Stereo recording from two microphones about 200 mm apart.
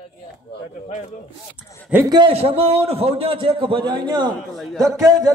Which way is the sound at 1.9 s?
20° right (ahead or behind).